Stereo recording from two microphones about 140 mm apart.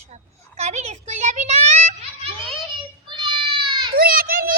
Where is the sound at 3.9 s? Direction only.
90° right.